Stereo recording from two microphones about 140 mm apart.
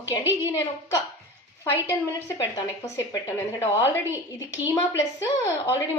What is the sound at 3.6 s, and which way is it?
A woman's voice, 20° left (ahead or behind).